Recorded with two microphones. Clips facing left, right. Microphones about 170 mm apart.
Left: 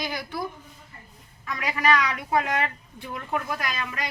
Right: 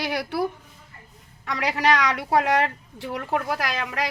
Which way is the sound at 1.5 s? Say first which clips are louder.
Right 2 dB; 75° right (ahead or behind).